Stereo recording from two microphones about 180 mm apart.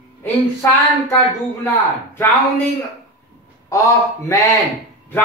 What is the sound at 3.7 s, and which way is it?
Speech, 15° left (ahead or behind).